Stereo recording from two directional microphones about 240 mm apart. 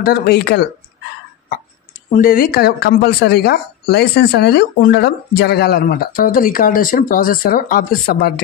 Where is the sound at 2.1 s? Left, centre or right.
Left.